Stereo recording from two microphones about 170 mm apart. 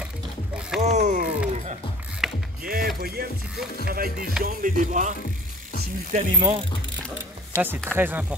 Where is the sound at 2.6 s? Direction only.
60° right (ahead or behind).